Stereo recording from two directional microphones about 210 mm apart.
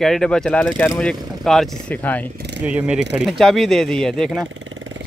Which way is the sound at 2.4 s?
55° right (ahead or behind).